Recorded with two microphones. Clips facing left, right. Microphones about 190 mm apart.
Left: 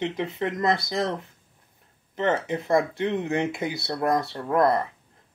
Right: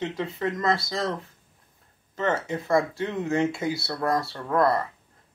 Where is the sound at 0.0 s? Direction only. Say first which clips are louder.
Left 1 dB; 20° left (ahead or behind).